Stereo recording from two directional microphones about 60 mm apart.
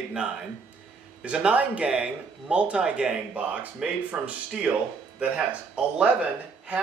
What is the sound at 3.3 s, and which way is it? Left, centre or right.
Speech, right.